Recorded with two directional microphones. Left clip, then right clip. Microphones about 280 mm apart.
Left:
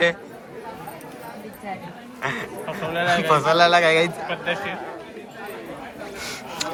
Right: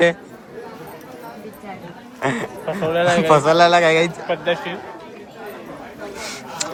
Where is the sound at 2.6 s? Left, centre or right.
Right.